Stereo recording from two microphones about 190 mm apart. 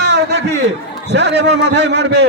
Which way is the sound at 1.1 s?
65° right (ahead or behind).